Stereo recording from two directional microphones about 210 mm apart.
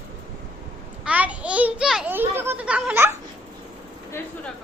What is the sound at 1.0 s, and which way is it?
A child's voice, 5° right (ahead or behind).